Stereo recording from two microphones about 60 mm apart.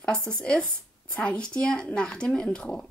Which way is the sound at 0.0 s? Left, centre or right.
Centre.